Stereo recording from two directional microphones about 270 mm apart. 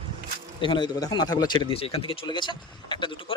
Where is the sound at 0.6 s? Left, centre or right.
Centre.